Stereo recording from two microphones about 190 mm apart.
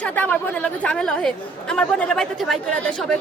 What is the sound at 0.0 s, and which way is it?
A woman's voice, 5° left (ahead or behind).